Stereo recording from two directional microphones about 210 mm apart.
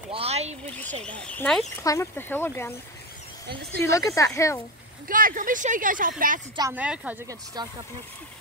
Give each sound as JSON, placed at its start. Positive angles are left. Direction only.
{"t": 0.1, "sound": "a sound", "side_deg": -30}
{"t": 1.0, "sound": "speech", "side_deg": 5}
{"t": 3.8, "sound": "speech", "side_deg": 15}
{"t": 5.0, "sound": "speech", "side_deg": -40}
{"t": 6.7, "sound": "speech", "side_deg": -5}
{"t": 7.6, "sound": "speech", "side_deg": -20}